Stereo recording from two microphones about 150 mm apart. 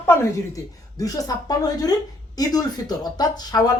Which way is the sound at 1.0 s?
25° left (ahead or behind).